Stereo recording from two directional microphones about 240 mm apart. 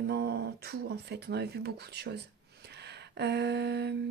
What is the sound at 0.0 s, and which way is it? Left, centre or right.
Speech, right.